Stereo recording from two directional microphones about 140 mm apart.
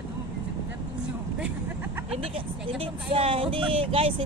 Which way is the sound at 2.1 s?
40° right (ahead or behind).